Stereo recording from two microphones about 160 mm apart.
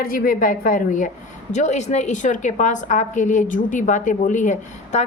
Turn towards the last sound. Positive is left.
turn(degrees=50)  # may be behind; listen again after turning